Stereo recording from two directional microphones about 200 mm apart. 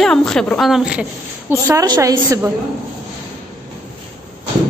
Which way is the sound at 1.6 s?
20° right (ahead or behind).